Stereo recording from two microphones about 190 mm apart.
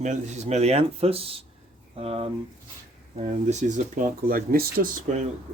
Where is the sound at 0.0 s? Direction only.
40° right (ahead or behind).